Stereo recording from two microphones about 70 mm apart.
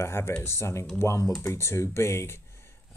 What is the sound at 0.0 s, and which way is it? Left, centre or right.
Speech, left.